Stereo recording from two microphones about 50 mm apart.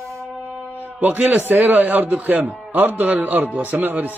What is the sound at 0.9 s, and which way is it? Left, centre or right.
Speech, right.